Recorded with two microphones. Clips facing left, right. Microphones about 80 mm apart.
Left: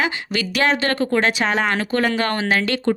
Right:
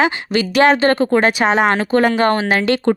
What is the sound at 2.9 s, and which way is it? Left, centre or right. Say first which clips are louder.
Speech: right 3 dB; right.